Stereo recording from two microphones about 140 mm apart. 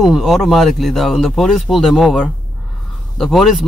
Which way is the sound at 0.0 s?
Centre (ahead or behind).